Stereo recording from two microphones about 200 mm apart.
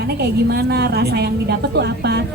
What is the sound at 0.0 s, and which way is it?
A woman's voice, 55° right (ahead or behind).